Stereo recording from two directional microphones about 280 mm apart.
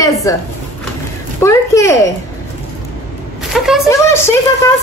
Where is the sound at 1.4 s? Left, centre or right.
Centre.